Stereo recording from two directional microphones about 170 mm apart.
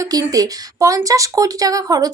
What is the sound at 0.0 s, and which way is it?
Speech, 20° right (ahead or behind).